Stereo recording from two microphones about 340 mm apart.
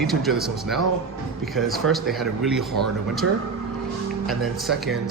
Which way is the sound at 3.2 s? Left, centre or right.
Right.